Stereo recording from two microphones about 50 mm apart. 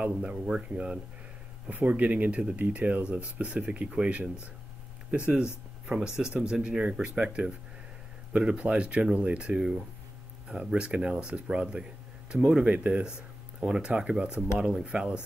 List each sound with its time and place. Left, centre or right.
0.0 s speech: right
9.6 s speech: centre